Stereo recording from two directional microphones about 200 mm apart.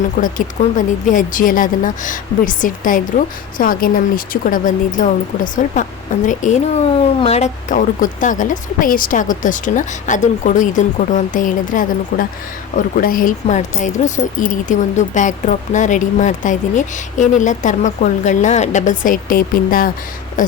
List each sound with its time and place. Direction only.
0.2 s speech: 40° left (ahead or behind)